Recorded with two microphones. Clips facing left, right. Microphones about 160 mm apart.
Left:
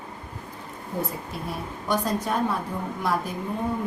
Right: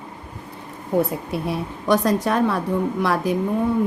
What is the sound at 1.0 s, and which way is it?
Speech, 70° right (ahead or behind).